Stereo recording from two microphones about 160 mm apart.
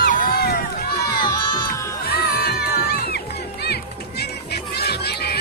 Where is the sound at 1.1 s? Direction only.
25° left (ahead or behind).